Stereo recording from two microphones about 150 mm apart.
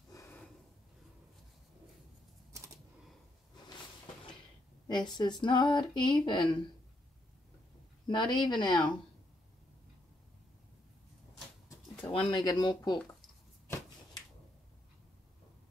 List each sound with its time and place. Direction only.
0.1 s snort: 20° left (ahead or behind)
4.8 s speech: 30° left (ahead or behind)
8.1 s speech: 30° left (ahead or behind)
12.1 s speech: 30° left (ahead or behind)